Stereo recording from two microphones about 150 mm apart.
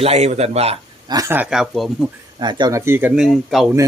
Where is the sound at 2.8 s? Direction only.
15° right (ahead or behind).